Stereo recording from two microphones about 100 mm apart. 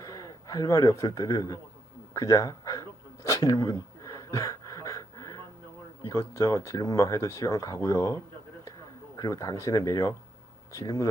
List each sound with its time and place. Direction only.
0.0 s speech: 35° left (ahead or behind)
3.2 s a sound: 35° left (ahead or behind)
6.0 s speech: 30° left (ahead or behind)